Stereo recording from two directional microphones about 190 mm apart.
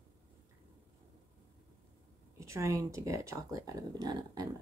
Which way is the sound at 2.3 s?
15° right (ahead or behind).